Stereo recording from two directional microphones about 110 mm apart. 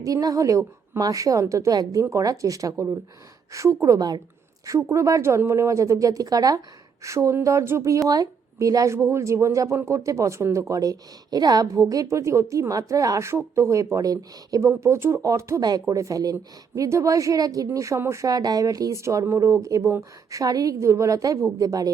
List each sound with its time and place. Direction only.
0.0 s a woman's voice: 35° right (ahead or behind)